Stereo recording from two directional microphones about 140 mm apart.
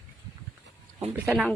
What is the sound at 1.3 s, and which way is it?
Speech, centre (ahead or behind).